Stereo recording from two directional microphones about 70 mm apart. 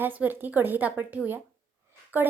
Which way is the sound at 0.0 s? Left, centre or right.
Right.